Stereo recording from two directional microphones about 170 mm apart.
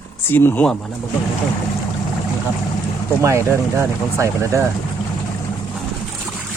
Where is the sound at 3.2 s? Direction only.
15° right (ahead or behind).